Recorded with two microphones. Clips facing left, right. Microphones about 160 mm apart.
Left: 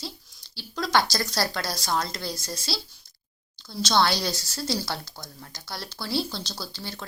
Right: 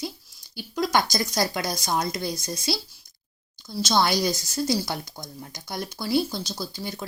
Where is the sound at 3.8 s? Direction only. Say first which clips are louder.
Right 1 dB; 10° right (ahead or behind).